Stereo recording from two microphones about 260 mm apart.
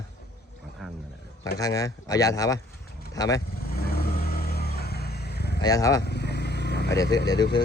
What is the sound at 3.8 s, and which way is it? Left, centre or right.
Vehicle, left.